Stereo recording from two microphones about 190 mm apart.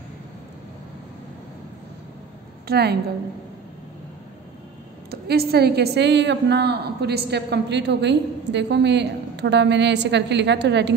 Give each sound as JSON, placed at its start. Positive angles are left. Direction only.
{"t": 2.7, "sound": "a woman's voice", "side_deg": -55}
{"t": 5.1, "sound": "a woman's voice", "side_deg": -55}